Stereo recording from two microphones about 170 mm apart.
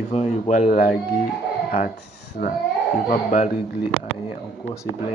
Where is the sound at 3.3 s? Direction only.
50° left (ahead or behind).